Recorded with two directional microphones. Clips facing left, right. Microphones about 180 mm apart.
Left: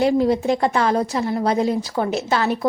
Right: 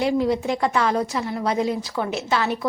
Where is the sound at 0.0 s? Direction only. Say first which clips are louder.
Left 4 dB; 40° left (ahead or behind).